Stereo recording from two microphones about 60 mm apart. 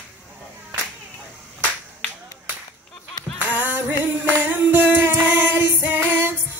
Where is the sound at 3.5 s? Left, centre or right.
Right.